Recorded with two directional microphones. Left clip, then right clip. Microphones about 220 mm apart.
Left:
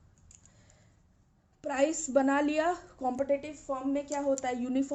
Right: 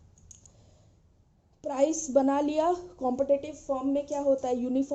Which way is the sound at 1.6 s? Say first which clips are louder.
Right 2 dB; 20° left (ahead or behind).